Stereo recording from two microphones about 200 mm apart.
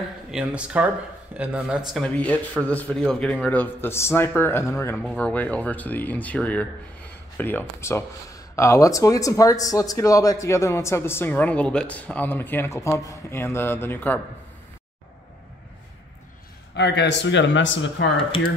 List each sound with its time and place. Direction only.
0.3 s speech: 5° right (ahead or behind)
2.0 s speech: 5° left (ahead or behind)
16.7 s speech: 60° left (ahead or behind)